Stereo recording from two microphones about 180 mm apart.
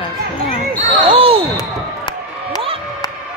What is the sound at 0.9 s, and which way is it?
Speech, 30° right (ahead or behind).